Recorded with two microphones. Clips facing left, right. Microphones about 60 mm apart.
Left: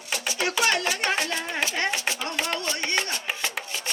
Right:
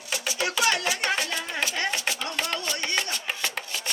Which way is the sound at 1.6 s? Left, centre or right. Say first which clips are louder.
Left 1 dB; left.